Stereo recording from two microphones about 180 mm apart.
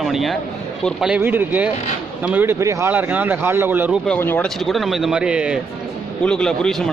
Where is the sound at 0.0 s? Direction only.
Centre (ahead or behind).